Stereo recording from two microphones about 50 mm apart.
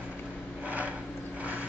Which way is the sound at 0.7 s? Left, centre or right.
Right.